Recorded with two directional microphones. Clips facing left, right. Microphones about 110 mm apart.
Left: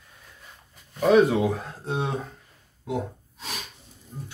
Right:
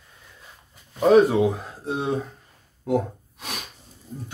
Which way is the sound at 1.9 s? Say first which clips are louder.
Right 3 dB; centre (ahead or behind).